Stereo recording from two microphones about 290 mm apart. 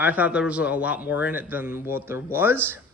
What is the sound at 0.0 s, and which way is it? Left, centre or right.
A man's voice, centre.